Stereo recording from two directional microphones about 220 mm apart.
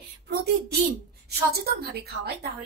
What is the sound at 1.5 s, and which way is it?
Speech, 45° right (ahead or behind).